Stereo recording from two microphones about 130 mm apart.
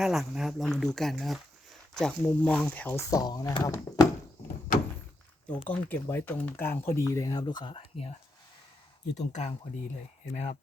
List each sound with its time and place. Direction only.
0.0 s speech: centre (ahead or behind)
3.0 s speech: 25° left (ahead or behind)
5.6 s speech: 15° left (ahead or behind); by 7.8 s 35° left (ahead or behind)
9.1 s speech: 65° left (ahead or behind)